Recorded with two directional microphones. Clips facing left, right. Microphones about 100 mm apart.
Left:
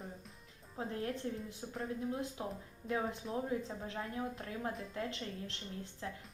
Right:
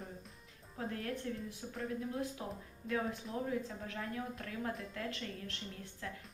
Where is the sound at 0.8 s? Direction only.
25° left (ahead or behind).